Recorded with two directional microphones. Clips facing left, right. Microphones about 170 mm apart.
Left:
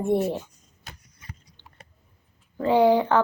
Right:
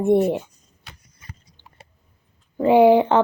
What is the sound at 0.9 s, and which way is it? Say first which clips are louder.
Vehicle: left 1 dB; 45° left (ahead or behind).